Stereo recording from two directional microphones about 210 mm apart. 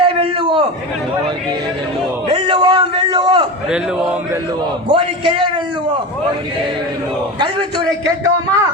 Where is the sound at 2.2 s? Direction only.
20° right (ahead or behind).